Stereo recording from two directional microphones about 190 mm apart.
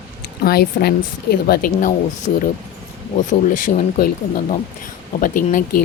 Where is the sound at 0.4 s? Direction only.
55° left (ahead or behind).